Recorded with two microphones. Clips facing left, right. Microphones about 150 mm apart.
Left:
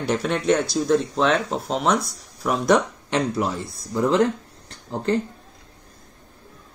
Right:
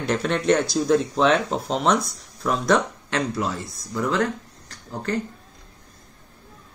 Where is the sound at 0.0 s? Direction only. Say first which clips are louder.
Even; 5° left (ahead or behind); by 5.2 s 25° left (ahead or behind).